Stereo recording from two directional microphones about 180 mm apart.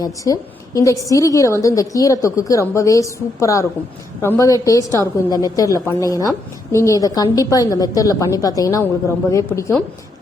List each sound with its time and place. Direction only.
0.0 s a woman's voice: 20° left (ahead or behind)